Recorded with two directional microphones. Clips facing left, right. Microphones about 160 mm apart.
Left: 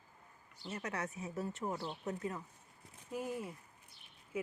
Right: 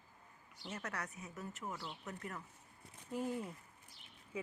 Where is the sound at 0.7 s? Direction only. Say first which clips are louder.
Left 3 dB; 10° left (ahead or behind).